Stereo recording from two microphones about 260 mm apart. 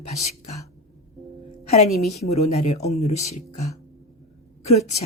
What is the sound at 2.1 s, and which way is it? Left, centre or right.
Speech, left.